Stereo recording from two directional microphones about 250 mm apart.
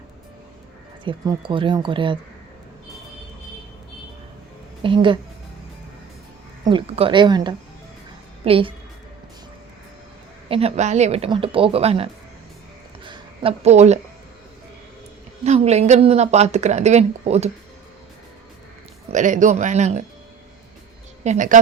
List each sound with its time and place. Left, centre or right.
1.0 s speech: centre
4.8 s speech: centre
6.7 s speech: right
10.5 s speech: right
13.1 s speech: right
15.4 s speech: right
19.1 s speech: right
21.2 s a woman's voice: right